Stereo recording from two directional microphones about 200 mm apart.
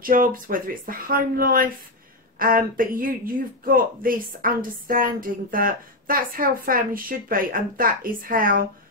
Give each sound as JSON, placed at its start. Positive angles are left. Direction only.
{"t": 0.0, "sound": "speech", "side_deg": -45}